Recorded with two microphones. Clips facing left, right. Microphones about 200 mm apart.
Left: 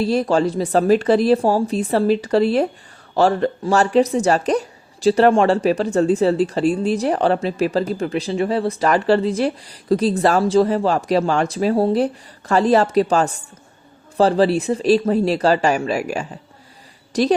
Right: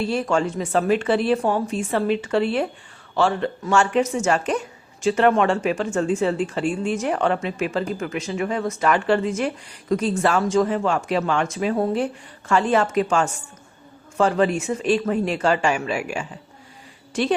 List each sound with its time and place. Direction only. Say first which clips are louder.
0.0 s speech: left 4 dB; 35° left (ahead or behind)